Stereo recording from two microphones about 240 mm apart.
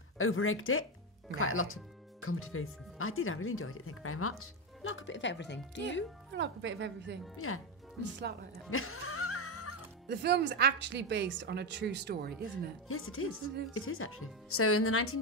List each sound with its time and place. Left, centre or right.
0.2 s speech: left
6.3 s a woman's voice: right
7.3 s speech: left
8.6 s music: left
10.0 s a woman's voice: right
12.8 s speech: left